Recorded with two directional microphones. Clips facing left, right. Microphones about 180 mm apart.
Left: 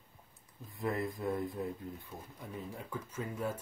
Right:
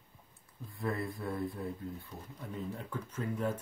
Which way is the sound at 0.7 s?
20° left (ahead or behind).